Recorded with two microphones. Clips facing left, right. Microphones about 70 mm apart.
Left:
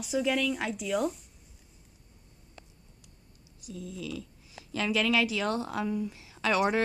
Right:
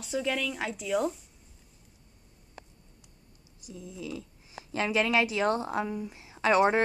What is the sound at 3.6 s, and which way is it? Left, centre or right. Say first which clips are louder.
Speech: left 1 dB; right.